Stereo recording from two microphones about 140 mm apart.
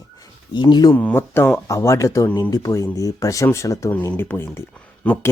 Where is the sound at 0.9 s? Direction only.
15° left (ahead or behind).